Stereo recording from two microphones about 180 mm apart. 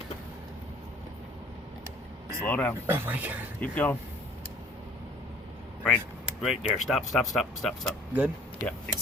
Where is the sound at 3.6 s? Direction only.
10° left (ahead or behind).